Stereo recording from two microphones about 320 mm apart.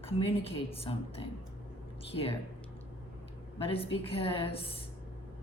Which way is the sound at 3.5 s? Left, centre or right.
Centre.